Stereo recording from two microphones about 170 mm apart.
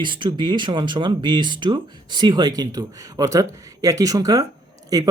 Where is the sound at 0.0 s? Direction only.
30° right (ahead or behind).